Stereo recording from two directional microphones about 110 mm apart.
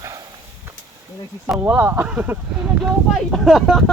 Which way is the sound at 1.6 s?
20° right (ahead or behind).